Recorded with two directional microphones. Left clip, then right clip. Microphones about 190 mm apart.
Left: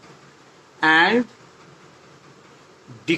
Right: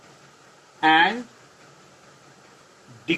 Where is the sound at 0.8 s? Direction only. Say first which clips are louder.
Left 2 dB; 15° left (ahead or behind).